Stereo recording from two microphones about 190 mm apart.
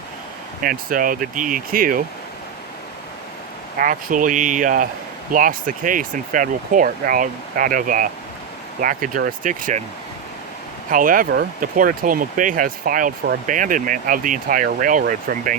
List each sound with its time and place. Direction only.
0.6 s speech: 45° right (ahead or behind)
3.8 s speech: 45° right (ahead or behind)
10.9 s speech: 45° right (ahead or behind)